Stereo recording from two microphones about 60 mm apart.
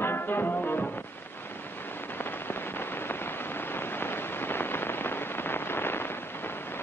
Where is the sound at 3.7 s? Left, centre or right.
Left.